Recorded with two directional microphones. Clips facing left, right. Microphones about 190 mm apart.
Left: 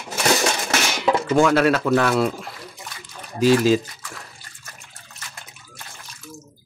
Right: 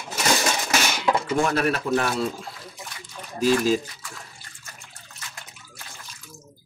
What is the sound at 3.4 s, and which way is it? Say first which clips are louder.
Speech: left 4 dB; 80° left.